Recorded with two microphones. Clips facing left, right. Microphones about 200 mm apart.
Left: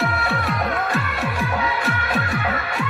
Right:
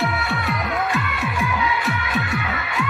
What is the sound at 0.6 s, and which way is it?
Music, 40° left (ahead or behind).